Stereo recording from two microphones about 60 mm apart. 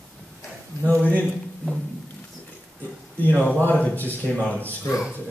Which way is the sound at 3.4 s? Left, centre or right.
Left.